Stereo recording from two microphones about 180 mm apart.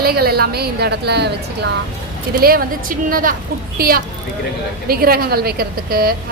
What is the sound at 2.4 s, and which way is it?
A woman's voice, 55° right (ahead or behind).